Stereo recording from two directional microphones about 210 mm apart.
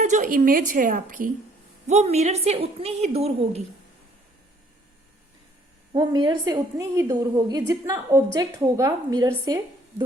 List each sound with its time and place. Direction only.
0.0 s a woman's voice: 35° right (ahead or behind)
5.9 s a woman's voice: 20° right (ahead or behind)